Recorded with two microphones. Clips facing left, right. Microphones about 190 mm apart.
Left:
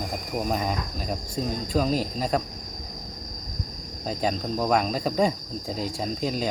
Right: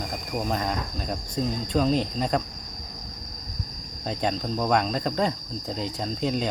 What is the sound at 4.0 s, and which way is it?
Cricket, 5° left (ahead or behind).